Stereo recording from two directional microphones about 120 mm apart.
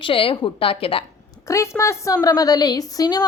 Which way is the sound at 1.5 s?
25° left (ahead or behind).